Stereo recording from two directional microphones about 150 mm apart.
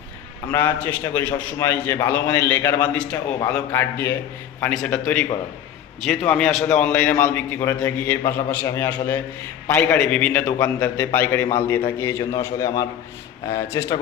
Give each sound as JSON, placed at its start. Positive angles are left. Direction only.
{"t": 0.5, "sound": "a man's voice", "side_deg": 10}